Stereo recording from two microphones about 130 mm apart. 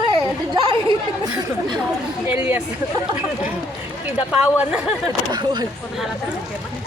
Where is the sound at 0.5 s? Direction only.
35° right (ahead or behind).